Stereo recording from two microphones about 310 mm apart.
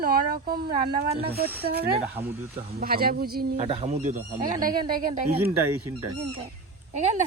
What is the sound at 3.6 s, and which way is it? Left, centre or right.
Speech, centre.